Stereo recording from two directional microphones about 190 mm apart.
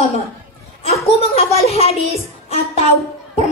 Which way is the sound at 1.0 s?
35° left (ahead or behind).